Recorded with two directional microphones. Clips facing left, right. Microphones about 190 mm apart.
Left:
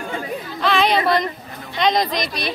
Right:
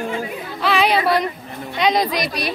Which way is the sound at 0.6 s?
5° right (ahead or behind).